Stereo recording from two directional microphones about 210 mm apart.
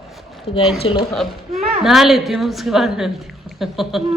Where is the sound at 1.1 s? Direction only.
Centre (ahead or behind).